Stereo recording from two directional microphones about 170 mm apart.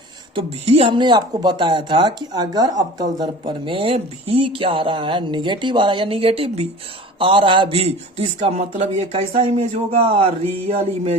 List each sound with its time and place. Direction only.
0.3 s a man's voice: 35° right (ahead or behind)